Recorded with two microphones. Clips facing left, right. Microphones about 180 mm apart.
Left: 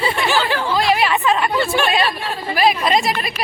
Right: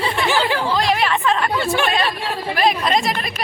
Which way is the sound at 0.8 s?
5° left (ahead or behind).